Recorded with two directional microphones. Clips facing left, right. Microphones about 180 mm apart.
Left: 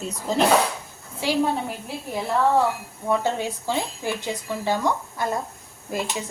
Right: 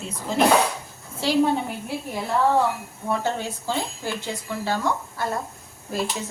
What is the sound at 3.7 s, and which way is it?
Speech, 15° left (ahead or behind).